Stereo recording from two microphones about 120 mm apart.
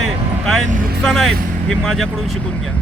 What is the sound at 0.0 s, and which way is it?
Vehicle, centre (ahead or behind).